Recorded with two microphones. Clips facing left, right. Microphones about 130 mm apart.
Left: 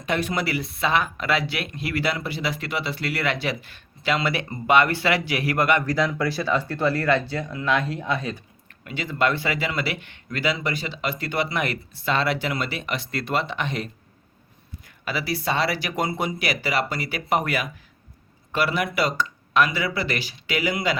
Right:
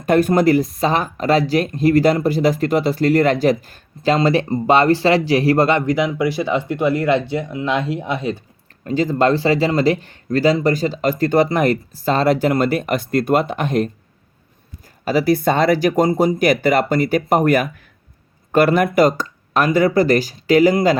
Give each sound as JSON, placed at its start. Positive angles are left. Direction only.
{"t": 0.0, "sound": "speech", "side_deg": -45}
{"t": 8.8, "sound": "speech", "side_deg": -40}
{"t": 15.0, "sound": "speech", "side_deg": -45}